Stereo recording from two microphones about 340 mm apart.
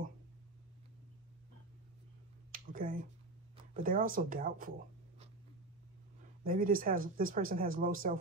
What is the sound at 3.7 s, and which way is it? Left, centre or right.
Speech, right.